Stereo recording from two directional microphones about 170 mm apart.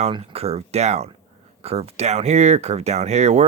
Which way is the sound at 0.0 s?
35° right (ahead or behind).